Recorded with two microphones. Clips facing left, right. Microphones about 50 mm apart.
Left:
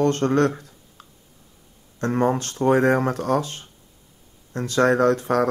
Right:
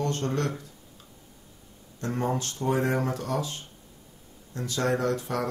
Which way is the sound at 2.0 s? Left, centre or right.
Left.